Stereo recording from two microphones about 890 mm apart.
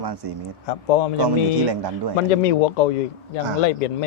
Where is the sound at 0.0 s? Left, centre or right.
Right.